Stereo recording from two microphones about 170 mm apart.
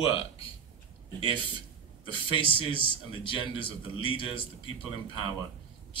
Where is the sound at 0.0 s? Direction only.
35° left (ahead or behind).